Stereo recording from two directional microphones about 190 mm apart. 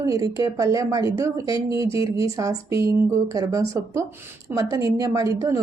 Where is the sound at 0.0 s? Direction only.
15° right (ahead or behind).